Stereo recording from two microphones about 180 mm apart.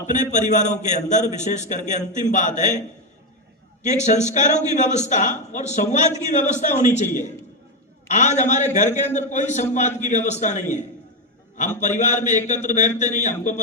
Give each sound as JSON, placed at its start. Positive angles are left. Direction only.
{"t": 0.1, "sound": "a man's voice", "side_deg": 40}
{"t": 3.8, "sound": "a man's voice", "side_deg": 40}
{"t": 8.1, "sound": "a man's voice", "side_deg": 40}